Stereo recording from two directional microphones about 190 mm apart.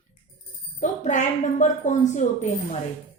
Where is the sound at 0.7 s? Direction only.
40° left (ahead or behind).